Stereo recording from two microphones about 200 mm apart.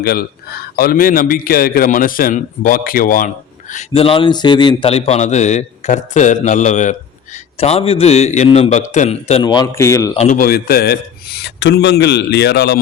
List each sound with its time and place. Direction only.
0.0 s a man's voice: 50° left (ahead or behind); by 9.4 s 35° left (ahead or behind)
9.4 s speech: 20° left (ahead or behind)
10.2 s speech: 40° left (ahead or behind)